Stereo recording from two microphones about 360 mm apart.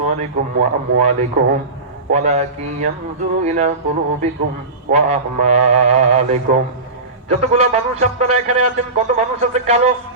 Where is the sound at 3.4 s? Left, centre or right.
Centre.